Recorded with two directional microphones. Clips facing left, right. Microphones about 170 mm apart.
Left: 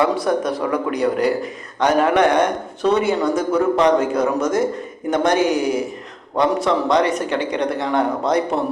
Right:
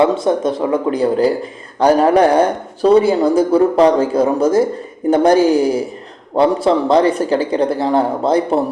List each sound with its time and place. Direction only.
0.0 s speech: 25° right (ahead or behind)